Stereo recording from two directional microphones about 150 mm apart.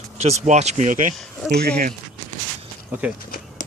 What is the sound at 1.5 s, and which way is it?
Speech, 90° right.